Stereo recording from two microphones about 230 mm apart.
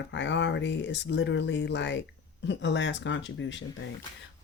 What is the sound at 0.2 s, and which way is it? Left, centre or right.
Speech, left.